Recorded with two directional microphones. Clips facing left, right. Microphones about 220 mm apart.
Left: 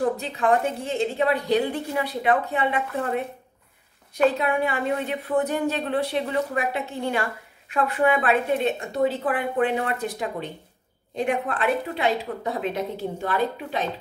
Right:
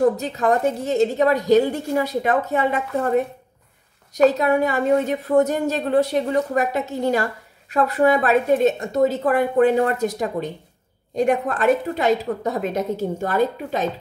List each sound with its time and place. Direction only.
0.2 s a woman's voice: 40° right (ahead or behind)